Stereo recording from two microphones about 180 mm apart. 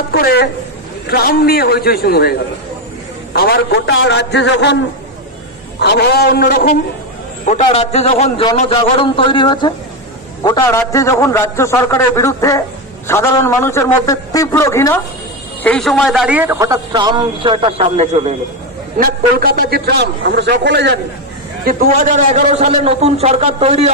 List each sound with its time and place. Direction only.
0.1 s a man's voice: 60° left (ahead or behind)
3.3 s a man's voice: 65° left (ahead or behind)
5.8 s a man's voice: 65° left (ahead or behind)
7.4 s a man's voice: 40° left (ahead or behind); by 15.0 s 15° left (ahead or behind)
15.6 s a man's voice: 5° left (ahead or behind); by 18.3 s 35° right (ahead or behind)
18.9 s a man's voice: 55° right (ahead or behind); by 21.0 s 70° right (ahead or behind)
21.6 s a man's voice: 50° right (ahead or behind); by 23.9 s 35° right (ahead or behind)